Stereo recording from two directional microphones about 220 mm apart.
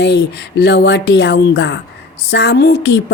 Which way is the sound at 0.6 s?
50° left (ahead or behind).